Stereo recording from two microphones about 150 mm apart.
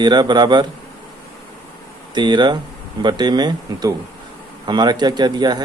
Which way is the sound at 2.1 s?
30° right (ahead or behind).